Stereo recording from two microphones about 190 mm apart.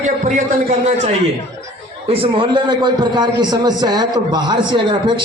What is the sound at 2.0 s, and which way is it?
A man's voice, 30° right (ahead or behind).